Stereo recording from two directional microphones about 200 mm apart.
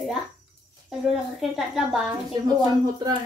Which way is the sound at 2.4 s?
20° right (ahead or behind).